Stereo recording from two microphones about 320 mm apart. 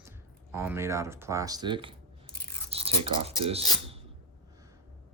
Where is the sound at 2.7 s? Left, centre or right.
Centre.